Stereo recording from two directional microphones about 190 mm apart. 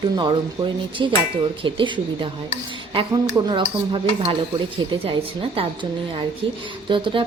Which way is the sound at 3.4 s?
25° right (ahead or behind).